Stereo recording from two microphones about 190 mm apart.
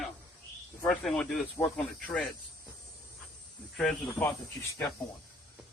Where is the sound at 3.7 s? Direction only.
Centre (ahead or behind).